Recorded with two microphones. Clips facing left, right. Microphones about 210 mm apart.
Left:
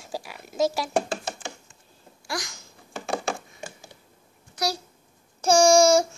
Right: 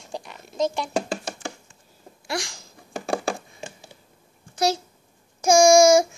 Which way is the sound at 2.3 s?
30° right (ahead or behind).